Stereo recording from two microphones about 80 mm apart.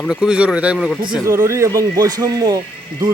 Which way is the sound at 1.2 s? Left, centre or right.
Right.